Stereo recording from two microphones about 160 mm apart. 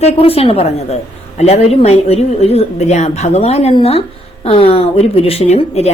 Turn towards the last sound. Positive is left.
turn(degrees=40)  # may be behind; listen again after turning